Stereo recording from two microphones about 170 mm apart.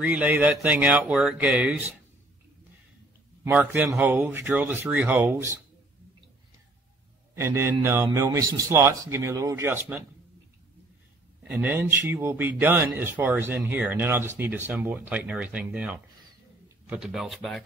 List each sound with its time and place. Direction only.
0.0 s speech: 10° right (ahead or behind)
3.4 s speech: 10° right (ahead or behind)
7.3 s speech: 15° right (ahead or behind)
11.4 s speech: 10° right (ahead or behind)